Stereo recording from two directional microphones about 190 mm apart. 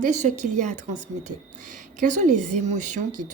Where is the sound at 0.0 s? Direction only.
40° right (ahead or behind).